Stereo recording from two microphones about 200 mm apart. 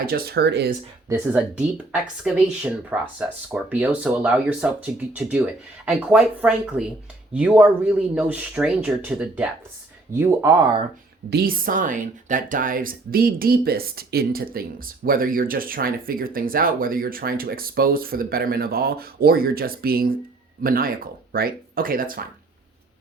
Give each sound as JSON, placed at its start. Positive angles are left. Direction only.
{"t": 0.0, "sound": "speech", "side_deg": -50}
{"t": 1.0, "sound": "speech", "side_deg": -15}
{"t": 11.3, "sound": "speech", "side_deg": -50}